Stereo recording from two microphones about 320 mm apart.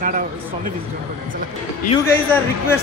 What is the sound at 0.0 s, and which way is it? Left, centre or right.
Speech, right.